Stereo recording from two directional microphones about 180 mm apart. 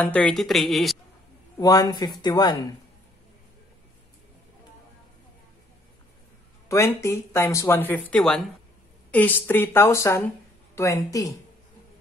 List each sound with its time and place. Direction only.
0.0 s a woman's voice: 5° left (ahead or behind)
1.6 s speech: 20° left (ahead or behind)
6.7 s speech: 15° left (ahead or behind)